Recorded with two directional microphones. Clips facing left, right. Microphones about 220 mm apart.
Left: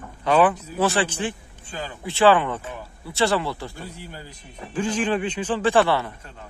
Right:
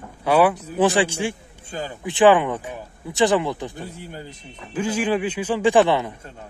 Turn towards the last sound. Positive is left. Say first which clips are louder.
# right 3 dB
turn(degrees=-15)  # may be behind; listen again after turning